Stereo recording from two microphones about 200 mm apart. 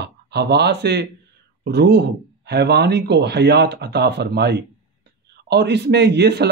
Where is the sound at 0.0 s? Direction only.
55° right (ahead or behind).